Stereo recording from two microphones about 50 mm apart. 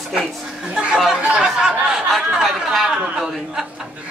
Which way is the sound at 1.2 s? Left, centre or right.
Centre.